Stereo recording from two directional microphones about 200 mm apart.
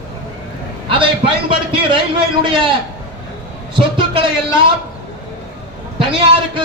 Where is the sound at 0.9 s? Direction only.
25° right (ahead or behind).